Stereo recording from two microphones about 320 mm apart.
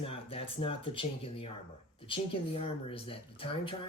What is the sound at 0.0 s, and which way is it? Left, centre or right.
Speech, centre.